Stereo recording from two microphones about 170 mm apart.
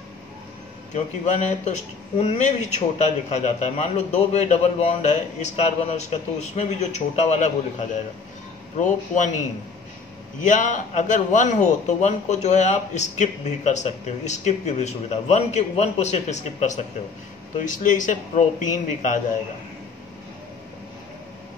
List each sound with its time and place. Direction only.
1.2 s a man's voice: 40° left (ahead or behind)
10.4 s a man's voice: 45° left (ahead or behind)